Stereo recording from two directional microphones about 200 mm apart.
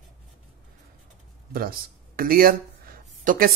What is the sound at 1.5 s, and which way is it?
Speech, 45° right (ahead or behind).